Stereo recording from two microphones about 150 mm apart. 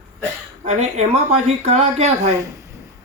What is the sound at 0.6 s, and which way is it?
Speech, 50° right (ahead or behind).